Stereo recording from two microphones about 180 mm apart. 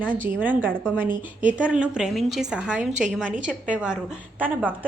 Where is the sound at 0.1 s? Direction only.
10° right (ahead or behind).